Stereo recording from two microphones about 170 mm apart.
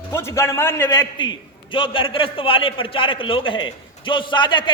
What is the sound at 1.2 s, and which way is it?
A man's voice, 30° left (ahead or behind).